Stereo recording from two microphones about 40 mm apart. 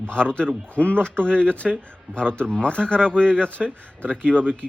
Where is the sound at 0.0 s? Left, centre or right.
Left.